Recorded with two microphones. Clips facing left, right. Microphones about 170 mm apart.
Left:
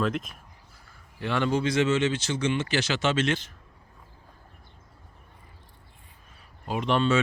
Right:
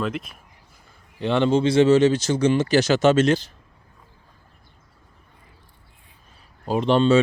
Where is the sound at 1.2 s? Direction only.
25° right (ahead or behind).